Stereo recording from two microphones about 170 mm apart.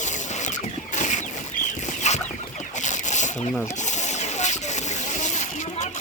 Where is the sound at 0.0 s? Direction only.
45° left (ahead or behind).